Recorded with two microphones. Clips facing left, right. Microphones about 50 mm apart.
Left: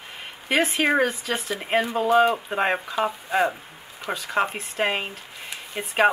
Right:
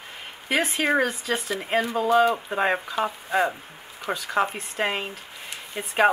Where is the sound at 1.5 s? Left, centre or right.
Left.